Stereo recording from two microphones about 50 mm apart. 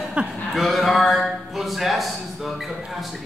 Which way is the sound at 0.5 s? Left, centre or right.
Centre.